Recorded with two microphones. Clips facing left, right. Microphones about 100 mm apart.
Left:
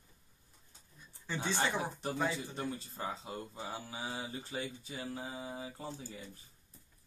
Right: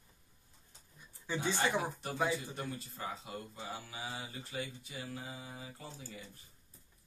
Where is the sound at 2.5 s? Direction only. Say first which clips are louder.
Left 2 dB; 30° left (ahead or behind).